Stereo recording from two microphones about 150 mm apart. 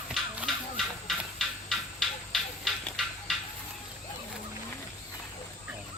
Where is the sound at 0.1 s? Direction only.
Centre (ahead or behind).